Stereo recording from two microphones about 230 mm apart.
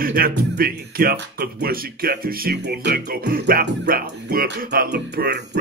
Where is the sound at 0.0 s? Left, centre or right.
Right.